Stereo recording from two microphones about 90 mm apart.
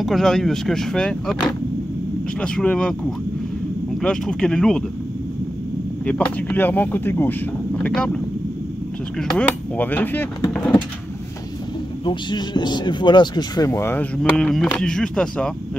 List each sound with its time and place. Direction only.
0.0 s speech: 5° left (ahead or behind)
2.4 s speech: 10° left (ahead or behind)
4.0 s speech: 10° left (ahead or behind)
6.0 s speech: 15° left (ahead or behind)
9.3 s speech: 15° left (ahead or behind)
12.0 s speech: 60° left (ahead or behind)
14.1 s speech: 10° left (ahead or behind)